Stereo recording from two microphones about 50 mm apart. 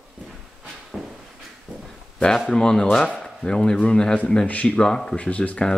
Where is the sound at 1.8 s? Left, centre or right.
Centre.